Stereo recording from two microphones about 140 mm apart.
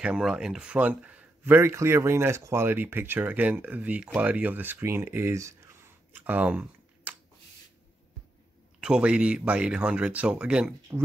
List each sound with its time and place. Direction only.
0.0 s speech: 5° right (ahead or behind)
8.8 s speech: 5° right (ahead or behind)
10.9 s speech: 20° right (ahead or behind)